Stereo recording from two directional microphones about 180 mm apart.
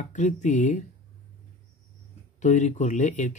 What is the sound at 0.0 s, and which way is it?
Speech, 40° left (ahead or behind).